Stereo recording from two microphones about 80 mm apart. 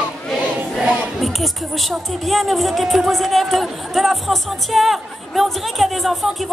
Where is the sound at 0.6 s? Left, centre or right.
Centre.